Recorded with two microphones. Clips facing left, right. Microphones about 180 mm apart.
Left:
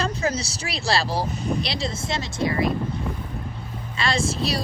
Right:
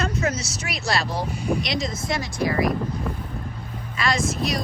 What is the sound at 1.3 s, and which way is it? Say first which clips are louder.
Speech: right 1 dB; 10° right (ahead or behind).